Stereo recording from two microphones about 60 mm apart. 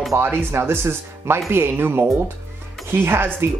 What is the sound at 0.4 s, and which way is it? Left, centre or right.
Speech, right.